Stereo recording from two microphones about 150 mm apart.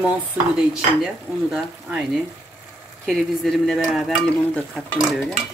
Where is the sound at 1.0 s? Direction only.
5° right (ahead or behind).